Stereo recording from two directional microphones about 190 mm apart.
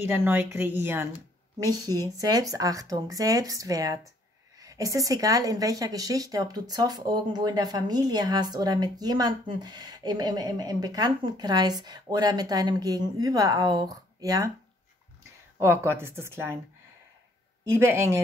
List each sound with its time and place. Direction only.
0.0 s a woman's voice: 10° right (ahead or behind)
15.6 s a woman's voice: 15° right (ahead or behind)
17.6 s a woman's voice: 15° right (ahead or behind)